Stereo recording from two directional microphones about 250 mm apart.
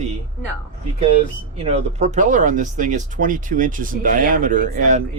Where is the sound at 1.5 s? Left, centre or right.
Right.